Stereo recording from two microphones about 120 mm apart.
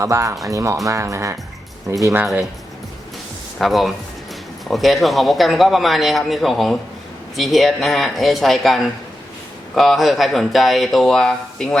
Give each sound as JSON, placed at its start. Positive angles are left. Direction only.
{"t": 0.0, "sound": "speech", "side_deg": -25}
{"t": 3.6, "sound": "a man's voice", "side_deg": 0}